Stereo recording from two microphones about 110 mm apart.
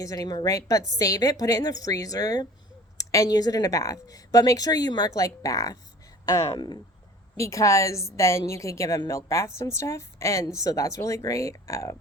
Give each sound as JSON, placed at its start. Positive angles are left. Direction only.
{"t": 0.0, "sound": "a woman's voice", "side_deg": 30}